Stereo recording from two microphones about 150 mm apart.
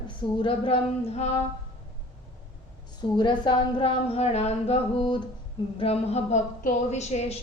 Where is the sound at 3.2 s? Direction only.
30° left (ahead or behind).